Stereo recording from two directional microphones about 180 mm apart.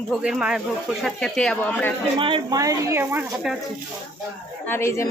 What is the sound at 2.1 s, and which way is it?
Speech, 30° right (ahead or behind).